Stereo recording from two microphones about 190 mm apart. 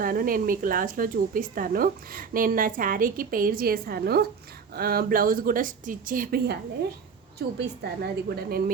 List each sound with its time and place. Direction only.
0.0 s a woman's voice: 50° right (ahead or behind)